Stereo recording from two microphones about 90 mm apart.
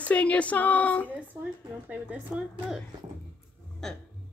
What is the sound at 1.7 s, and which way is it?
Speech, 15° right (ahead or behind).